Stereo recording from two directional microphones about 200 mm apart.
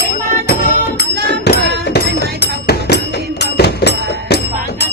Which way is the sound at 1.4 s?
55° left (ahead or behind).